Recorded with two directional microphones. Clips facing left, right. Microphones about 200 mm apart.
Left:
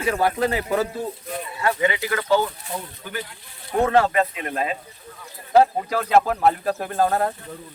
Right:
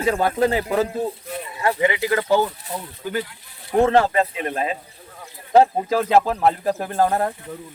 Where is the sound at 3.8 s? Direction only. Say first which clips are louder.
Even; 30° right (ahead or behind).